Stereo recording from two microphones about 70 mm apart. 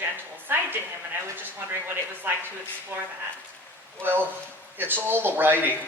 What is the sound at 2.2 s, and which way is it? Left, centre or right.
Speech, right.